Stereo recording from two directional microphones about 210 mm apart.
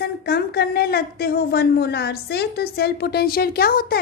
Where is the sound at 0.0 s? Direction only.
50° left (ahead or behind).